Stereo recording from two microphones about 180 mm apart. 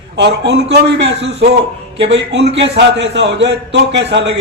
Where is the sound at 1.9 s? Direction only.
80° right.